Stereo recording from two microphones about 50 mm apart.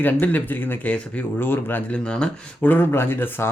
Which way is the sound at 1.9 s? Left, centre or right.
Centre.